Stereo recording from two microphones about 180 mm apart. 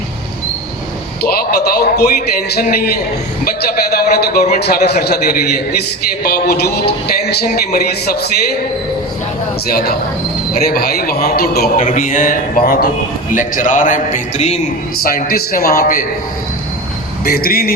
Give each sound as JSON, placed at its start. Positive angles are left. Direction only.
{"t": 1.2, "sound": "a man's voice", "side_deg": 55}
{"t": 3.9, "sound": "a man's voice", "side_deg": 60}
{"t": 10.7, "sound": "a man's voice", "side_deg": 60}
{"t": 11.9, "sound": "a man's voice", "side_deg": 45}
{"t": 15.0, "sound": "a man's voice", "side_deg": 55}
{"t": 17.2, "sound": "a man's voice", "side_deg": 55}